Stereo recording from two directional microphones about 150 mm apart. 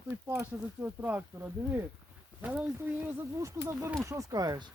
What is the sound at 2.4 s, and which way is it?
Speech, 10° right (ahead or behind).